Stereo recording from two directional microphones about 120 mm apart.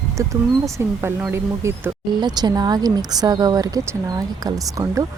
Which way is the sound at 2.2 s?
35° right (ahead or behind).